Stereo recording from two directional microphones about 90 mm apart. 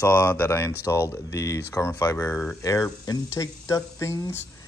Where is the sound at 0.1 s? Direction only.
25° left (ahead or behind).